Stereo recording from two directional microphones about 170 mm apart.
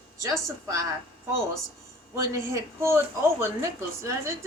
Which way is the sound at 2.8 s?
15° right (ahead or behind).